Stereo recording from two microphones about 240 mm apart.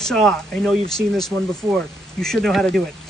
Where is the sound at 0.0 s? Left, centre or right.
Centre.